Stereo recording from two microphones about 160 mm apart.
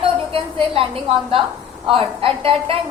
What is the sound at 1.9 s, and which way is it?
Speech, 35° right (ahead or behind).